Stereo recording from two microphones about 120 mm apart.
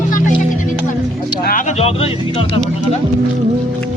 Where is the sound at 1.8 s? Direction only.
55° left (ahead or behind).